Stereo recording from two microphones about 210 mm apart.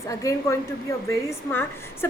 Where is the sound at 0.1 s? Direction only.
15° left (ahead or behind).